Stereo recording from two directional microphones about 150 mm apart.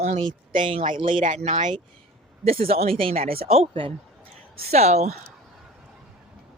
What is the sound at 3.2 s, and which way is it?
Speech, 75° right (ahead or behind).